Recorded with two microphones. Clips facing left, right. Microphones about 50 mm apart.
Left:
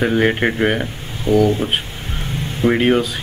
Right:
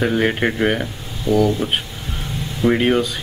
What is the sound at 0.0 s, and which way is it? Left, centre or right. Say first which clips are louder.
Speech: left 2 dB; centre.